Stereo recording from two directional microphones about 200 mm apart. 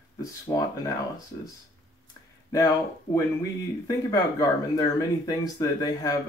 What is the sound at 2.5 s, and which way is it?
Speech, 15° left (ahead or behind).